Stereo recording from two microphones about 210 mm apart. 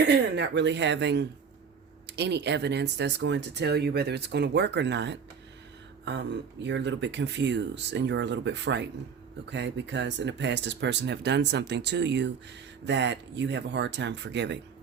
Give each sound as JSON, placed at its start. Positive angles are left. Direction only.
{"t": 0.0, "sound": "speech", "side_deg": -55}